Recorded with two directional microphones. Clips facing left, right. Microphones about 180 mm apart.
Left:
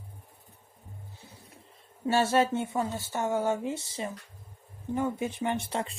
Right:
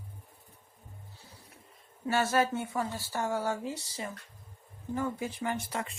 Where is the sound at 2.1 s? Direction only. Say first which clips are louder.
Left 3 dB; 25° left (ahead or behind).